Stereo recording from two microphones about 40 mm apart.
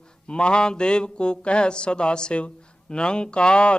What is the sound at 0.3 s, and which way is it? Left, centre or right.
Speech, left.